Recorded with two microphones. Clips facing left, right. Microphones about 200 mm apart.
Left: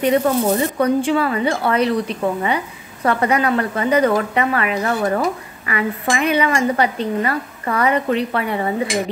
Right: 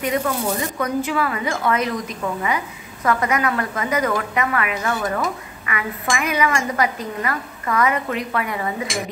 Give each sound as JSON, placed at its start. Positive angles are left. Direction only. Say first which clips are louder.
{"t": 0.0, "sound": "speech", "louder": "left 6 dB", "side_deg": 30}